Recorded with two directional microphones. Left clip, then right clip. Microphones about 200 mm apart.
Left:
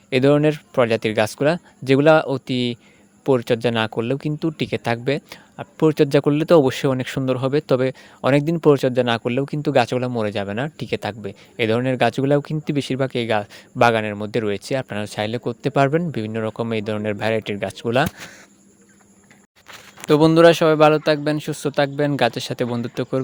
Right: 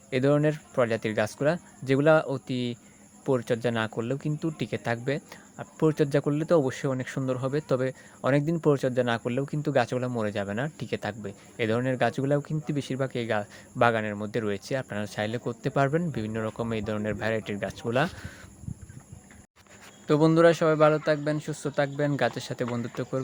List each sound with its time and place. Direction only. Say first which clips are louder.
0.1 s speech: left 8 dB; 45° left (ahead or behind)
20.1 s speech: left 8 dB; 40° left (ahead or behind)